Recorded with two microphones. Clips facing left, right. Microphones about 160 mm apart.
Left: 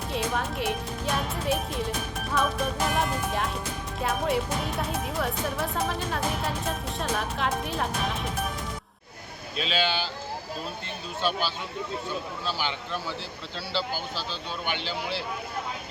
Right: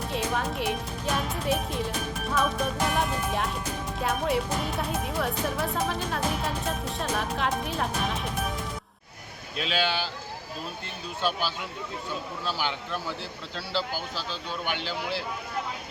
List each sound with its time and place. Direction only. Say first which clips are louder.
0.1 s speech: left 1 dB; centre (ahead or behind)
9.6 s speech: even; 10° right (ahead or behind)
11.2 s speech: even; 10° right (ahead or behind)
14.7 s speech: even; 10° right (ahead or behind)